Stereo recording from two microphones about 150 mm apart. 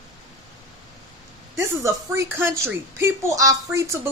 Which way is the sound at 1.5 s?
20° right (ahead or behind).